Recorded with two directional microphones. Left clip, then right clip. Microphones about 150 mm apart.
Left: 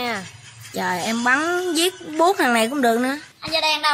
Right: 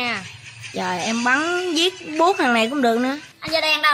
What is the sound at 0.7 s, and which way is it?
A woman's voice, 10° left (ahead or behind).